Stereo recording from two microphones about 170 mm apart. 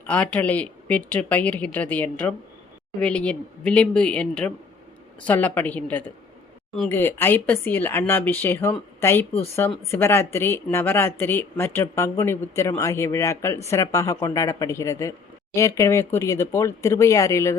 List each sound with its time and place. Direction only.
0.0 s speech: 10° left (ahead or behind)